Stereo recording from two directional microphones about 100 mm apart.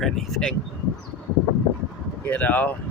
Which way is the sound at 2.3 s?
15° left (ahead or behind).